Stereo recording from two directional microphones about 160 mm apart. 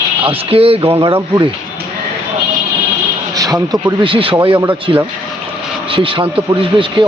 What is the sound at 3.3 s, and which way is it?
Speech, 20° right (ahead or behind).